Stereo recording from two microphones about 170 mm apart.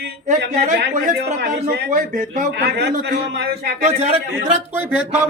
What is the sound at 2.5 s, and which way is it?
Speech, 70° right (ahead or behind).